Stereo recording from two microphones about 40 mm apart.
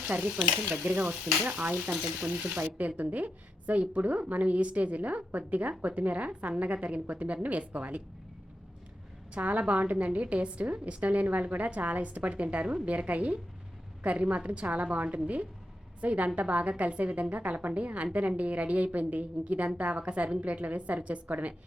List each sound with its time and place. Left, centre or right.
0.0 s stir: right
0.7 s a woman's voice: right
1.9 s frying: right
2.6 s a woman's voice: right
9.3 s a woman's voice: right